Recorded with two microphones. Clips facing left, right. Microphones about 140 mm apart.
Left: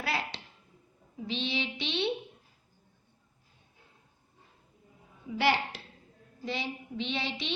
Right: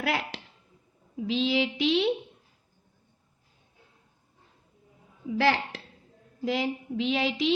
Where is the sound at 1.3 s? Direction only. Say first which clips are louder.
Right 8 dB; 90° right.